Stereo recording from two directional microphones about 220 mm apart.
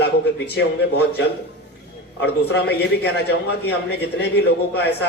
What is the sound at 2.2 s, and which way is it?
A man's voice, 50° left (ahead or behind).